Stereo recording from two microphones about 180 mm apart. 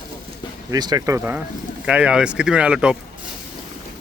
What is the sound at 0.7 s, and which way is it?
Speech, 20° right (ahead or behind).